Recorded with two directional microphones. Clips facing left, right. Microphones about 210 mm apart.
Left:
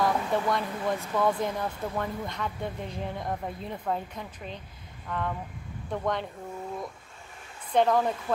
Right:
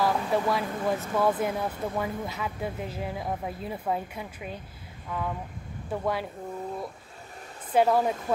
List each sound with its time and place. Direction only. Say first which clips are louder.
0.0 s speech: right 1 dB; 5° right (ahead or behind)
7.7 s speech: right 1 dB; 10° right (ahead or behind)